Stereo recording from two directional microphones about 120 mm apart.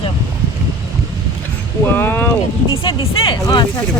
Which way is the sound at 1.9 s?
15° left (ahead or behind).